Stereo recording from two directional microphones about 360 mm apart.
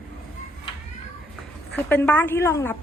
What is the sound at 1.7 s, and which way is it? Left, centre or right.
A woman's voice, centre.